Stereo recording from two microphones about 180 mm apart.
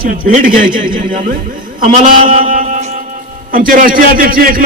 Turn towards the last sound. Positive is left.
turn(degrees=-55)  # may be behind; listen again after turning